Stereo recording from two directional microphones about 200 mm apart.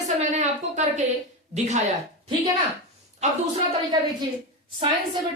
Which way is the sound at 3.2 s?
35° right (ahead or behind).